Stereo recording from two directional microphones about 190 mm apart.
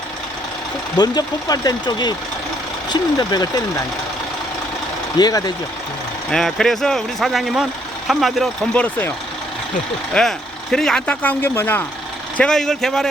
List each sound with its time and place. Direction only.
0.9 s speech: 20° left (ahead or behind)
5.1 s speech: 20° left (ahead or behind)
6.3 s speech: centre (ahead or behind)
10.2 s speech: centre (ahead or behind)